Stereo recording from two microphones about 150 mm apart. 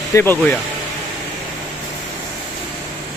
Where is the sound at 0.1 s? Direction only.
15° left (ahead or behind).